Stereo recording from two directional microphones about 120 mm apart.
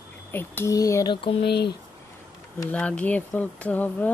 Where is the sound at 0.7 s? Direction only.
30° left (ahead or behind).